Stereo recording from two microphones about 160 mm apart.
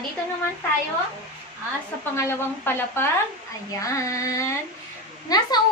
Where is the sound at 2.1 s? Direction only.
15° left (ahead or behind).